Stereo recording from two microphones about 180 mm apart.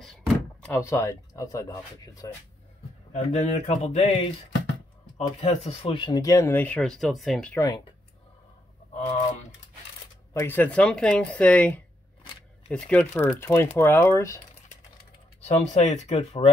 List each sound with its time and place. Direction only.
0.0 s door: 5° left (ahead or behind)
2.2 s speech: 20° left (ahead or behind)
3.1 s speech: 40° left (ahead or behind); by 7.6 s 5° left (ahead or behind)
10.4 s speech: 10° left (ahead or behind)
15.4 s speech: 40° left (ahead or behind)